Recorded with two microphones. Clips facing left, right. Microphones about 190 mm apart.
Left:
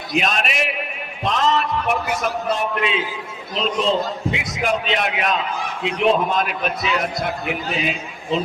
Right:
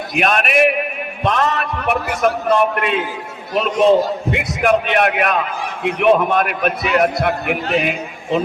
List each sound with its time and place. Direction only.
0.1 s a man's voice: 60° right (ahead or behind)